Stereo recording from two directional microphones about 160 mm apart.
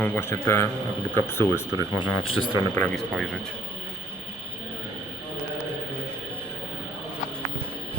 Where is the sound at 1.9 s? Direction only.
30° left (ahead or behind).